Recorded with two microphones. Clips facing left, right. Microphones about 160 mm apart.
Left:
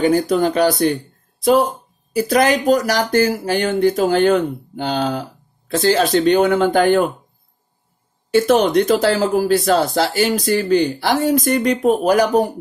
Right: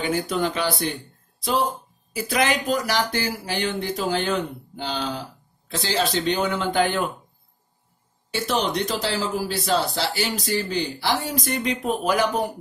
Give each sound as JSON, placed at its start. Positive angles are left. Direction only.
{"t": 0.0, "sound": "speech", "side_deg": 40}
{"t": 2.1, "sound": "speech", "side_deg": 40}
{"t": 8.3, "sound": "speech", "side_deg": 50}